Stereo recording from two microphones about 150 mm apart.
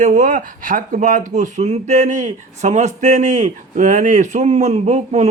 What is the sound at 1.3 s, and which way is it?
A man's voice, 50° right (ahead or behind).